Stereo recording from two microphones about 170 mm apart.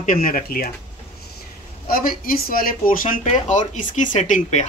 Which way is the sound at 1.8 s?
60° left (ahead or behind).